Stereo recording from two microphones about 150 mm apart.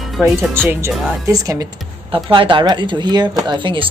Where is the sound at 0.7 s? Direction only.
20° right (ahead or behind).